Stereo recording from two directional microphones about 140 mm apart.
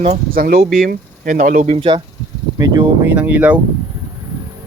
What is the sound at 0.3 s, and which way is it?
Speech, 90° right.